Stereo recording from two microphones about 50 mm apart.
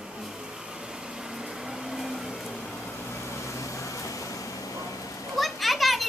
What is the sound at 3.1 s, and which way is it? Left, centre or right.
Vehicle, left.